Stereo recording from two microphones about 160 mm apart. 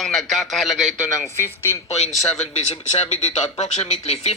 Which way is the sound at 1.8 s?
40° left (ahead or behind).